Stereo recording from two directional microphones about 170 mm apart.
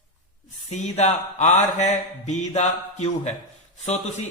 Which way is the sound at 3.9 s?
40° left (ahead or behind).